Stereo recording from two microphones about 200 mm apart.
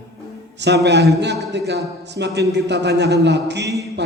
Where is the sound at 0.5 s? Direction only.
60° right (ahead or behind).